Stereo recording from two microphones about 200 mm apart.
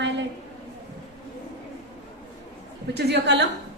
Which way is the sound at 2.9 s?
60° right (ahead or behind).